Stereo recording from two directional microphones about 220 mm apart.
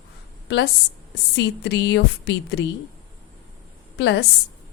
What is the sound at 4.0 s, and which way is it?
Speech, 55° left (ahead or behind).